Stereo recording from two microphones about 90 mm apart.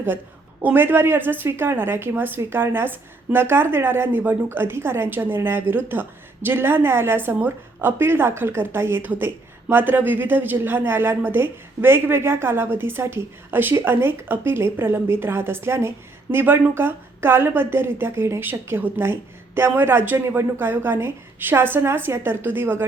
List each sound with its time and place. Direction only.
0.6 s a woman's voice: 25° right (ahead or behind)